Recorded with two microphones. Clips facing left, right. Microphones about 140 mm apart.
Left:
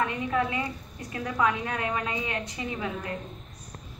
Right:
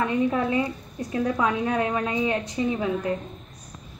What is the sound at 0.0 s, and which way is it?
A woman's voice, 30° right (ahead or behind).